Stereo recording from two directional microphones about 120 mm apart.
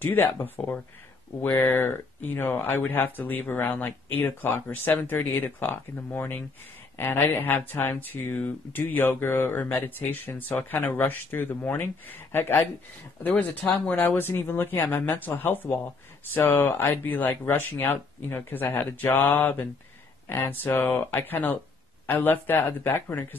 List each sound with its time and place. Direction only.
0.0 s speech: 15° left (ahead or behind)